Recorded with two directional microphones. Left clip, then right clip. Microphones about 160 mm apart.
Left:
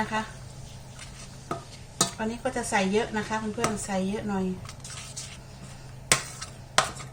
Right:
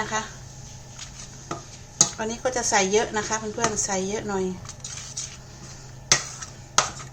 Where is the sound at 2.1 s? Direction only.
85° right.